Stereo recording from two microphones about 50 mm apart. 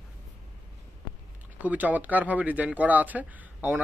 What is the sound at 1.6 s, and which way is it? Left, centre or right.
Speech, right.